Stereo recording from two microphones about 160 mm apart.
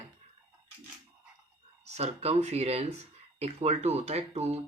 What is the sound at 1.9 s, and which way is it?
Speech, 40° right (ahead or behind).